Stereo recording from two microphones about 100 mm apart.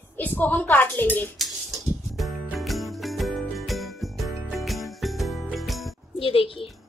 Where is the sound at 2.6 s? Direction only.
Centre (ahead or behind).